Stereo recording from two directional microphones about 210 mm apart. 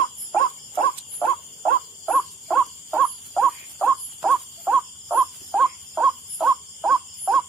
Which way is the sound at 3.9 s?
5° right (ahead or behind).